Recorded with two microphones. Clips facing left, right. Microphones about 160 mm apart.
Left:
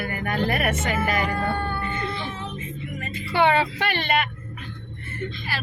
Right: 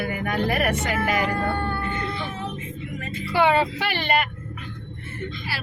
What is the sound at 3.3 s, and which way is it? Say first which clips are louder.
Speech: right 1 dB; 5° right (ahead or behind).